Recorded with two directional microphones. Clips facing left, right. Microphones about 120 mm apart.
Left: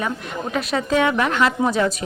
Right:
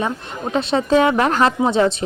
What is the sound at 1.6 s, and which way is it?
Speech, 25° right (ahead or behind).